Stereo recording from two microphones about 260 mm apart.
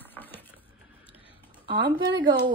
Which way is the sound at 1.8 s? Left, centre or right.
Centre.